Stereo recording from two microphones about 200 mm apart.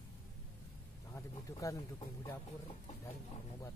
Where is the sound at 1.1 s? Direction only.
15° left (ahead or behind).